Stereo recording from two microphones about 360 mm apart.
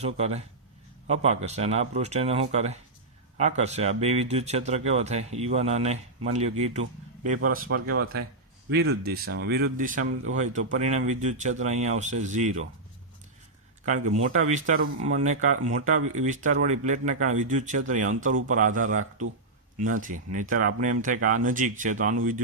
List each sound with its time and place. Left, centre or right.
0.0 s speech: centre
7.5 s speech: right
13.8 s speech: right